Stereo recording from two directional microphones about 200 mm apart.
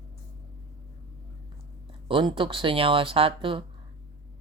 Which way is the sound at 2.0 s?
25° right (ahead or behind).